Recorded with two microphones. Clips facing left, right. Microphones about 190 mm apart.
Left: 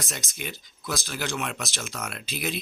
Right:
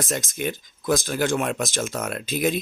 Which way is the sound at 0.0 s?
45° right (ahead or behind).